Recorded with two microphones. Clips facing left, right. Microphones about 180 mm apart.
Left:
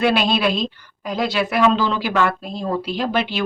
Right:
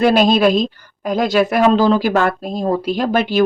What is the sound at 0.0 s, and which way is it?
A woman's voice, 40° right (ahead or behind).